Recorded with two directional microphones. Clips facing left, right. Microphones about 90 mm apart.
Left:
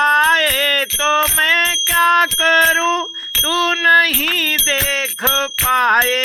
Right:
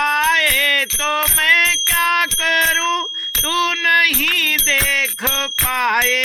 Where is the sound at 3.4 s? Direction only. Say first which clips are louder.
Left 2 dB; 35° left (ahead or behind).